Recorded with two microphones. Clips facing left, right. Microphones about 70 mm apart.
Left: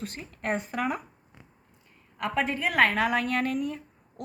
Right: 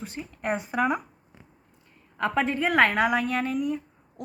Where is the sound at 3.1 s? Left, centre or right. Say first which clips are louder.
Right 1 dB; centre.